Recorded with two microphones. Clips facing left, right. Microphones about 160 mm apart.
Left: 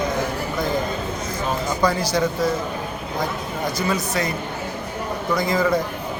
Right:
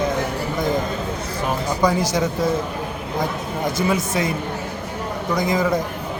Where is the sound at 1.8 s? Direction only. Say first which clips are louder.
Right 2 dB; 20° right (ahead or behind).